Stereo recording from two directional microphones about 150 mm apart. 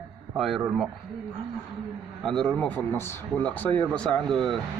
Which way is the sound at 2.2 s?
Centre (ahead or behind).